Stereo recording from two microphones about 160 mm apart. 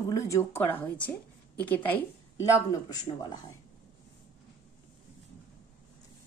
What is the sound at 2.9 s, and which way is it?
Speech, 25° left (ahead or behind).